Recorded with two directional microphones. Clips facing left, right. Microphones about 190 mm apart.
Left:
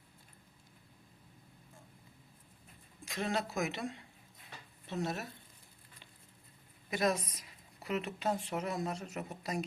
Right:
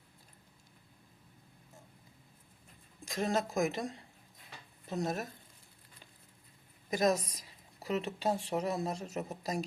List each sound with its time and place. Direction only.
3.0 s a sound: 40° right (ahead or behind)
3.5 s speech: 45° right (ahead or behind)
6.9 s a woman's voice: 40° right (ahead or behind)